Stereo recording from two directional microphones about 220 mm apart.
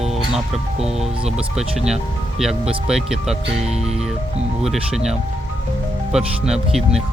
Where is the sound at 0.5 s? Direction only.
30° right (ahead or behind).